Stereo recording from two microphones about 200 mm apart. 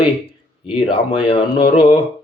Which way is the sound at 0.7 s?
25° left (ahead or behind).